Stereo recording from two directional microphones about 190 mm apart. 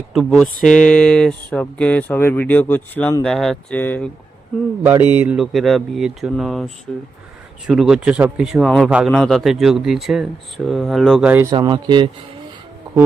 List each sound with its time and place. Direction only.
0.1 s speech: centre (ahead or behind)
4.8 s speech: 10° right (ahead or behind)
11.5 s speech: 25° right (ahead or behind)